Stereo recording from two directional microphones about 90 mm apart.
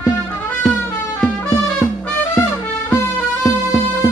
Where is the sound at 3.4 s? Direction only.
40° left (ahead or behind).